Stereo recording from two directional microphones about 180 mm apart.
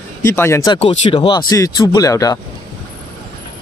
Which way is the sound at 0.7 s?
30° left (ahead or behind).